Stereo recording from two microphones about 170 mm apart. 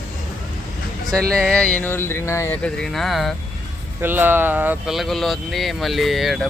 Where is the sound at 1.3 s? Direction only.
5° left (ahead or behind).